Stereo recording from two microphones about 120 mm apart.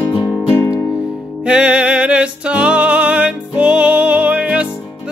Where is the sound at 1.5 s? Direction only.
10° right (ahead or behind).